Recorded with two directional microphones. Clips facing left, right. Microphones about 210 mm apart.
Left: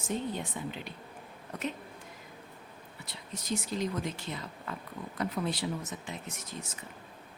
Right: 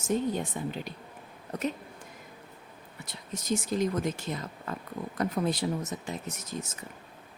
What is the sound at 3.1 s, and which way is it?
Speech, 45° right (ahead or behind).